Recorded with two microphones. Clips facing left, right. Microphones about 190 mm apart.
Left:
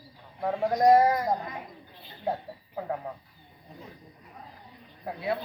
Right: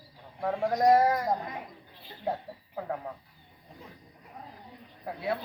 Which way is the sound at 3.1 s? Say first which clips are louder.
Left 2 dB; 5° left (ahead or behind).